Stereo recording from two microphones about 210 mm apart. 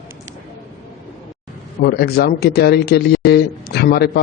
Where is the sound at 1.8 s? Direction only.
50° left (ahead or behind).